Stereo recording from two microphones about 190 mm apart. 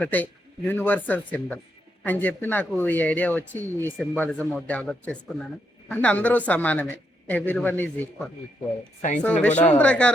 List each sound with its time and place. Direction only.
0.0 s speech: 10° left (ahead or behind)
9.0 s speech: 40° left (ahead or behind)
9.2 s speech: 5° left (ahead or behind)